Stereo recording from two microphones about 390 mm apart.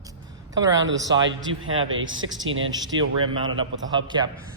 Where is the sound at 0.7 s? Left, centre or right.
Right.